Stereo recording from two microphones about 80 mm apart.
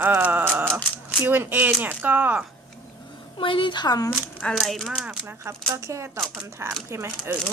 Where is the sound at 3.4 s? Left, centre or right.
Left.